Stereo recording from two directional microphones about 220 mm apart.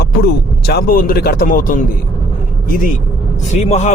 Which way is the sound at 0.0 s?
45° left (ahead or behind).